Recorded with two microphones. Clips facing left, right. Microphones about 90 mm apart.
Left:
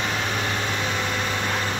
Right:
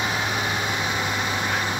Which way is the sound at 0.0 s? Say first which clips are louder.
Right 1 dB; 15° right (ahead or behind).